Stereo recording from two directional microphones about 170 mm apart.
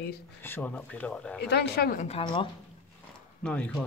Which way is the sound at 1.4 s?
75° left (ahead or behind).